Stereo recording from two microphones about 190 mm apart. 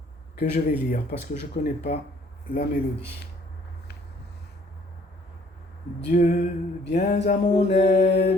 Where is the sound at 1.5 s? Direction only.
35° left (ahead or behind).